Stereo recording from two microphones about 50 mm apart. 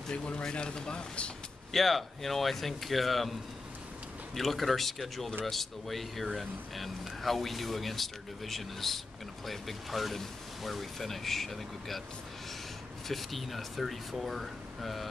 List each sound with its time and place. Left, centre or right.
0.1 s a man's voice: centre
1.7 s speech: centre
4.4 s speech: centre
13.1 s speech: centre